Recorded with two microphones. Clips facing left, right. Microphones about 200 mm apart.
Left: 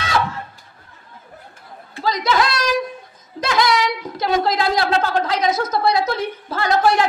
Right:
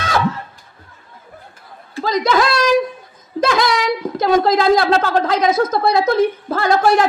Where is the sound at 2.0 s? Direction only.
50° right (ahead or behind).